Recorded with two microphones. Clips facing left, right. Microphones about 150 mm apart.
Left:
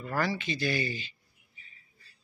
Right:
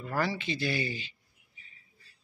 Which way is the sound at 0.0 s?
20° right (ahead or behind).